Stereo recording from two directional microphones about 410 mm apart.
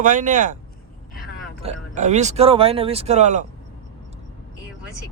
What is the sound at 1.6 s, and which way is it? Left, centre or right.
A man's voice, centre.